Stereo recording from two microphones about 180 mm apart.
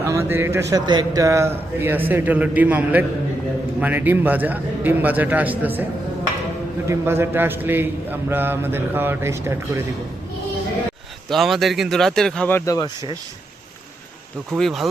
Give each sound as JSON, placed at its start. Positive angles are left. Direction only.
{"t": 0.0, "sound": "a sound", "side_deg": -15}
{"t": 0.7, "sound": "a man's voice", "side_deg": -20}
{"t": 6.8, "sound": "a man's voice", "side_deg": -15}
{"t": 11.3, "sound": "speech", "side_deg": 0}
{"t": 14.5, "sound": "speech", "side_deg": 0}